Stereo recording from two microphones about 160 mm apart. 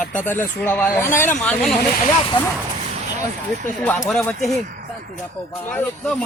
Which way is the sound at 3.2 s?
10° left (ahead or behind).